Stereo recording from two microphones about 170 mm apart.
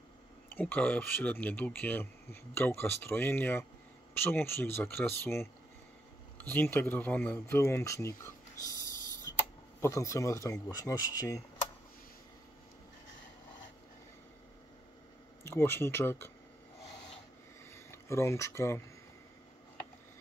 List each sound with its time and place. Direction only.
0.5 s speech: 10° left (ahead or behind)
15.4 s speech: 15° left (ahead or behind)
17.7 s speech: 15° left (ahead or behind)